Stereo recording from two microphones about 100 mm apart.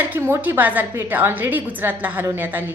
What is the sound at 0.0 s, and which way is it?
A woman's voice, 20° right (ahead or behind).